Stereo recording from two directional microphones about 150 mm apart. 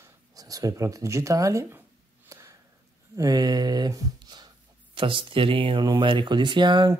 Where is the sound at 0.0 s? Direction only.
25° right (ahead or behind).